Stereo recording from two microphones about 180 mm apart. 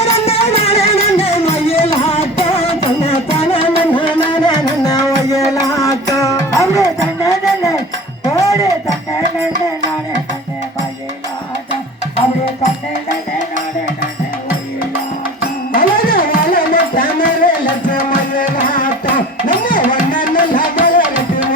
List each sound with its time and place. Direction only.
0.0 s music: 35° left (ahead or behind); by 6.8 s 15° left (ahead or behind)
7.3 s a sound: 20° left (ahead or behind)
8.2 s music: 20° left (ahead or behind)
15.7 s music: 55° left (ahead or behind)